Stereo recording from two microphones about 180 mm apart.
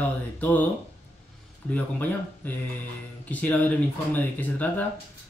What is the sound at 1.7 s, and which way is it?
A man's voice, 10° left (ahead or behind).